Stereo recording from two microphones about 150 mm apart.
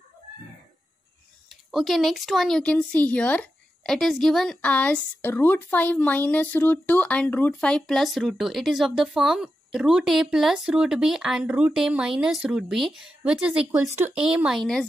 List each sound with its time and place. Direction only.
1.7 s speech: centre (ahead or behind)
13.7 s speech: 15° right (ahead or behind)
14.2 s speech: 5° right (ahead or behind)